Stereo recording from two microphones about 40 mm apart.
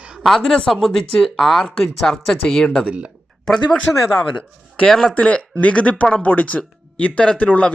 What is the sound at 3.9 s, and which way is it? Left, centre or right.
Speech, left.